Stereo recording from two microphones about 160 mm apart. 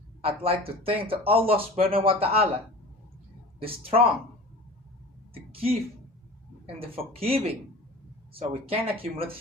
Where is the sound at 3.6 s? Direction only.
35° right (ahead or behind).